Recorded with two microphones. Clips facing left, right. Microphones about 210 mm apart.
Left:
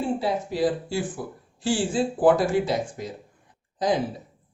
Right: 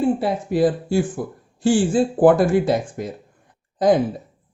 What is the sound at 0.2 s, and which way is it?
Speech, 55° right (ahead or behind).